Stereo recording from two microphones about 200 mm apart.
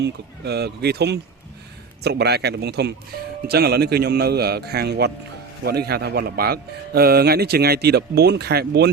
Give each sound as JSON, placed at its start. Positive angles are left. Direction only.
{"t": 0.0, "sound": "speech", "side_deg": -55}